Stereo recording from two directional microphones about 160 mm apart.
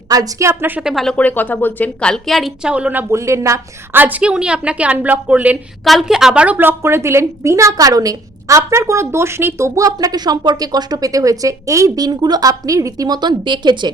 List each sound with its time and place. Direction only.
0.1 s a woman's voice: 20° right (ahead or behind)